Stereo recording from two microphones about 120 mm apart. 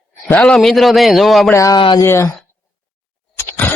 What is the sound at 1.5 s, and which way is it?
Speech, 25° left (ahead or behind).